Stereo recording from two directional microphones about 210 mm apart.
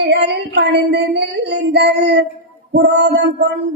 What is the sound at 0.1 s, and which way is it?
Child singing, 55° right (ahead or behind).